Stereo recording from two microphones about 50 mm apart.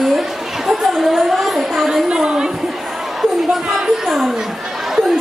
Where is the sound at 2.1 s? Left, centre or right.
Centre.